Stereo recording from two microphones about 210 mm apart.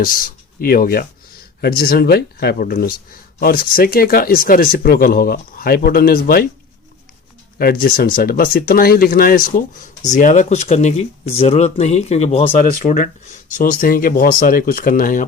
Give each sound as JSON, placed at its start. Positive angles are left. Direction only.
{"t": 0.0, "sound": "speech", "side_deg": 40}
{"t": 7.6, "sound": "speech", "side_deg": 45}